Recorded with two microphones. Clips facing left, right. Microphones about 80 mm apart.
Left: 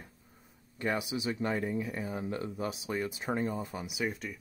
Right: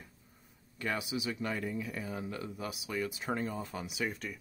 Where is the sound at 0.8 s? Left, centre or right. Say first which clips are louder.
Left 3 dB; left.